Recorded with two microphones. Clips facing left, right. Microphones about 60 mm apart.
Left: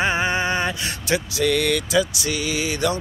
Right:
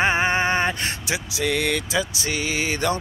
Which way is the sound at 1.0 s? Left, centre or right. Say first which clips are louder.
Left 6 dB; centre.